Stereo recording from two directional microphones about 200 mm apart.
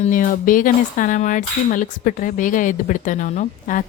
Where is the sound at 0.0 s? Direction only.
40° left (ahead or behind).